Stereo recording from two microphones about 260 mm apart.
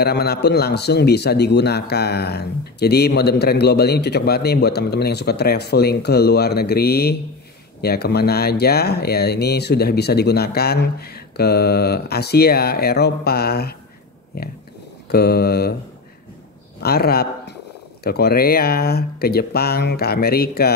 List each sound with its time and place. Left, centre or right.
0.0 s a man's voice: left
16.8 s a man's voice: left